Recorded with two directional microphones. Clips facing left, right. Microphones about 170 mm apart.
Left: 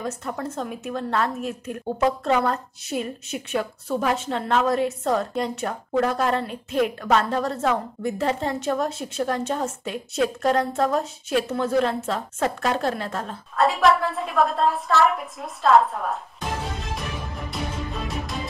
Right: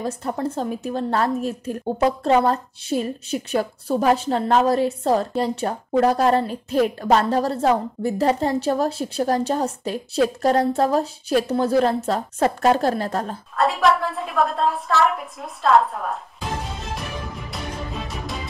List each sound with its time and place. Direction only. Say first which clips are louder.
0.0 s a woman's voice: right 4 dB; 30° right (ahead or behind)
13.6 s a woman's voice: even; centre (ahead or behind)
17.5 s music: left 2 dB; centre (ahead or behind)